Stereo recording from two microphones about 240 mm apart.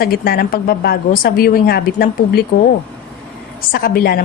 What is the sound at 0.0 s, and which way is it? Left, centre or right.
A woman's voice, left.